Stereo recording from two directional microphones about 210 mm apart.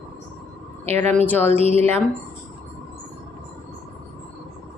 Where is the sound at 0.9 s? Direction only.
10° left (ahead or behind).